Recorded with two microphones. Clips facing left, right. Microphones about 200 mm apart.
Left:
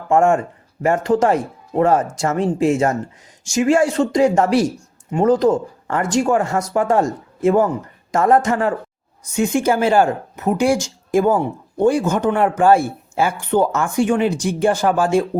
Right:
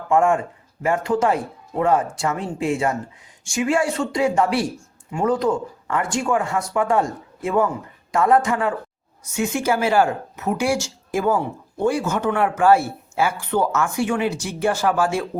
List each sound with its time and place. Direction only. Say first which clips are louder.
0.1 s speech: left 3 dB; 45° left (ahead or behind)